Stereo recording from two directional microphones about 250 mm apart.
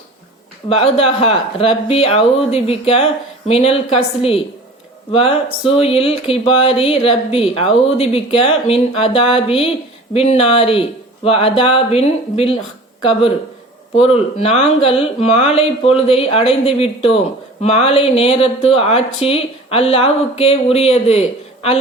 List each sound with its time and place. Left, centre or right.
0.7 s speech: left